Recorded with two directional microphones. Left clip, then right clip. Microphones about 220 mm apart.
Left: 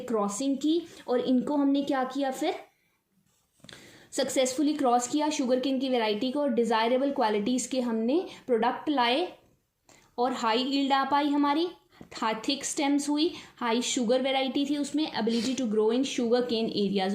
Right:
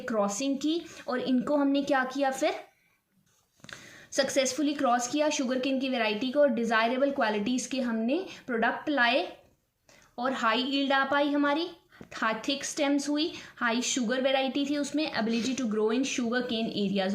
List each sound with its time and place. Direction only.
0.0 s a woman's voice: 20° right (ahead or behind)
3.7 s a sound: 25° right (ahead or behind)
4.6 s a woman's voice: 20° right (ahead or behind)
10.2 s a woman's voice: 20° right (ahead or behind)